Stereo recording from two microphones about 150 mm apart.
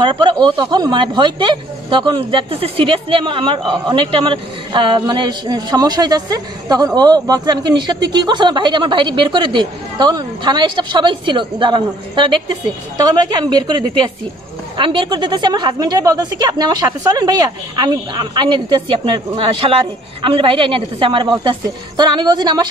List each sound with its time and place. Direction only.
0.0 s speech: 30° right (ahead or behind)